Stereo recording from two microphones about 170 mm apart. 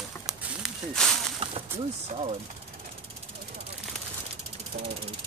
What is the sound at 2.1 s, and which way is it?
Speech, 35° right (ahead or behind).